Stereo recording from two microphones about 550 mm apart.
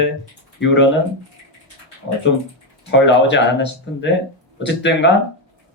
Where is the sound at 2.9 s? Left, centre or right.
Centre.